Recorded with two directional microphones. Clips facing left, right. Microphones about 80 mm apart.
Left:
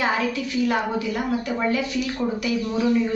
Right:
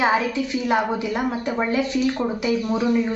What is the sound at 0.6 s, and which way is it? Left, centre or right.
Speech, right.